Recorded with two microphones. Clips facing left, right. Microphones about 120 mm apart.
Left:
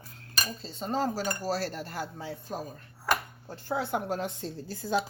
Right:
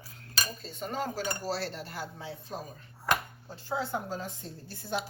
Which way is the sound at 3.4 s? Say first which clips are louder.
Left 2 dB; 50° left (ahead or behind).